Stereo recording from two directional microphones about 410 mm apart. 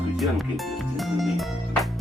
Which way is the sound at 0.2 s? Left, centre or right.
Centre.